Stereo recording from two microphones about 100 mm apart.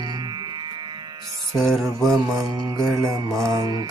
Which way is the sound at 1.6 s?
5° left (ahead or behind).